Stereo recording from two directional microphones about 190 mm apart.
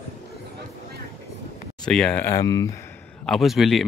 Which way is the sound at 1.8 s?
5° left (ahead or behind).